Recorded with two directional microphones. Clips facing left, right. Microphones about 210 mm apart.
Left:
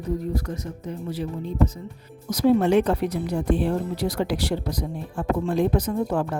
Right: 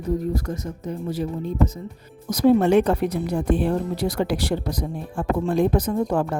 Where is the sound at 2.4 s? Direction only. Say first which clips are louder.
Right 2 dB; 50° right (ahead or behind).